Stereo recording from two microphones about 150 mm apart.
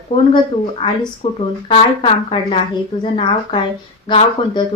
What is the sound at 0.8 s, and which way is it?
Speech, 40° left (ahead or behind).